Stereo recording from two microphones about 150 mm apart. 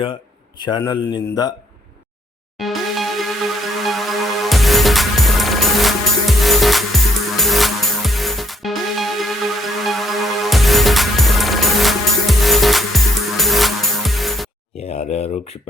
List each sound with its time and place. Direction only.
0.8 s a man's voice: 25° left (ahead or behind)
2.6 s music: centre (ahead or behind)
14.8 s a sound: 45° left (ahead or behind)